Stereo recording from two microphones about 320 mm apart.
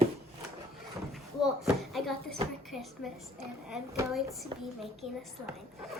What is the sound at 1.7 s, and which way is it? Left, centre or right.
A child's voice, centre.